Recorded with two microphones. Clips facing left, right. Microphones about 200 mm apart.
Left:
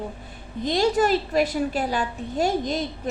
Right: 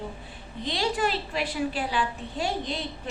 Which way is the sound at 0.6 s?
45° left (ahead or behind).